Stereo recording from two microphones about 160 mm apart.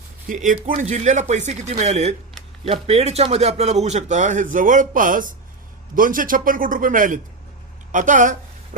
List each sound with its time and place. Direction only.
0.3 s speech: 55° right (ahead or behind)